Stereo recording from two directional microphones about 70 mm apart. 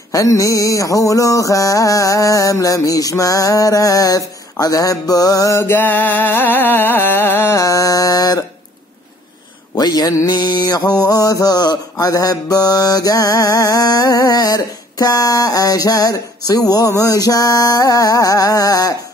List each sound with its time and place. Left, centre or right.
0.1 s mantra: left
5.6 s music: left
7.5 s mantra: left
9.8 s mantra: left
11.0 s mantra: left